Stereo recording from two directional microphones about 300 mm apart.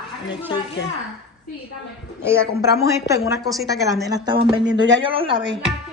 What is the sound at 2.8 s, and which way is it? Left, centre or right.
A woman's voice, centre.